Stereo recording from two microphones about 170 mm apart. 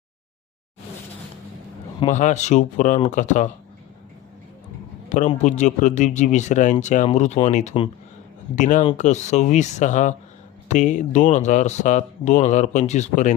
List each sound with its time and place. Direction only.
2.0 s a man's voice: 45° left (ahead or behind)
5.0 s a man's voice: 45° left (ahead or behind)